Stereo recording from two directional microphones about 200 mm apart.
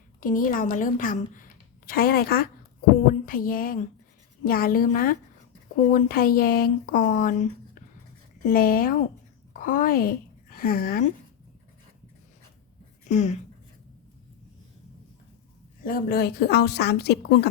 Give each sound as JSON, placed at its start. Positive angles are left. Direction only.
{"t": 0.2, "sound": "a woman's voice", "side_deg": 45}
{"t": 13.1, "sound": "speech", "side_deg": 35}
{"t": 15.8, "sound": "speech", "side_deg": 45}